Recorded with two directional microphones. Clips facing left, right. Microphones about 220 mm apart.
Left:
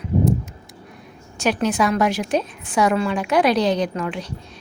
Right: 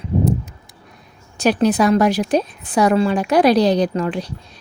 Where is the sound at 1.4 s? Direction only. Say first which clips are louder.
Right 4 dB; 35° right (ahead or behind).